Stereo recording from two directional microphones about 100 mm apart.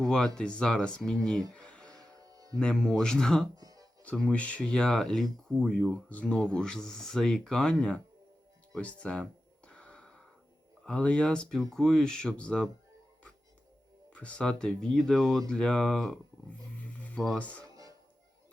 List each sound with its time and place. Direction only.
0.0 s speech: 5° left (ahead or behind)
1.5 s a sound: 10° left (ahead or behind)
2.1 s music: 35° right (ahead or behind)
2.6 s speech: 5° left (ahead or behind)
3.5 s music: 35° right (ahead or behind)
4.0 s speech: 10° left (ahead or behind)
9.6 s a sound: 10° left (ahead or behind)
10.8 s speech: 10° left (ahead or behind)
14.1 s speech: 10° left (ahead or behind)
17.6 s music: 35° right (ahead or behind)